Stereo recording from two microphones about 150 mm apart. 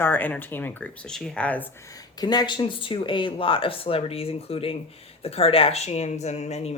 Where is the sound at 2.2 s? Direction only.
30° left (ahead or behind); by 6.8 s 45° left (ahead or behind).